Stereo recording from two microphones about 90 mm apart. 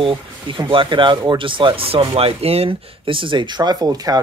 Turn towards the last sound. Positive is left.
turn(degrees=-45)  # may be behind; listen again after turning